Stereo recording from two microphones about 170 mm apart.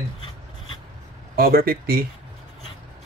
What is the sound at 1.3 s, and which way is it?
Speech, 60° right (ahead or behind).